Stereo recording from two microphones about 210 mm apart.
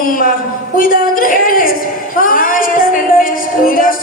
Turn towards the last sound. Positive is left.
turn(degrees=40)  # may be behind; listen again after turning